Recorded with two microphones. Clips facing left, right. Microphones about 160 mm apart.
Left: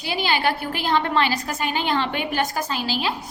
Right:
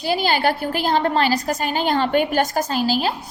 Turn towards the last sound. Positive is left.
turn(degrees=-45)  # may be behind; listen again after turning